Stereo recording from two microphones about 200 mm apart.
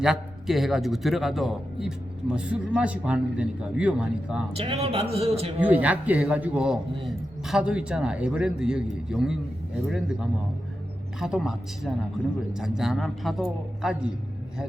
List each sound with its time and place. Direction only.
0.0 s a man's voice: centre (ahead or behind)
4.5 s a man's voice: 30° right (ahead or behind)
5.5 s a man's voice: 5° right (ahead or behind)
11.2 s a man's voice: 5° right (ahead or behind)